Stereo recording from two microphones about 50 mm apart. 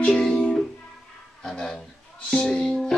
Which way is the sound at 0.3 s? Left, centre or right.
Centre.